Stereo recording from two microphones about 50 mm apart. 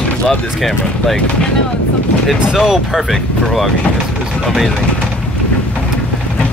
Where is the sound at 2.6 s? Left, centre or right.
Centre.